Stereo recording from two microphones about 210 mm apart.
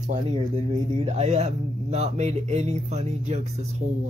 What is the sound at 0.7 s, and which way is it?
Speech, 30° right (ahead or behind).